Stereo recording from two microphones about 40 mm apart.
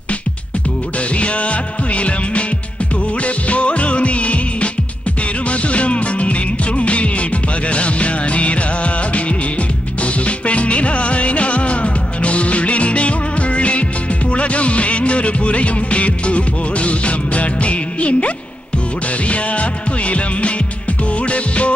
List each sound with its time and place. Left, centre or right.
1.1 s music: left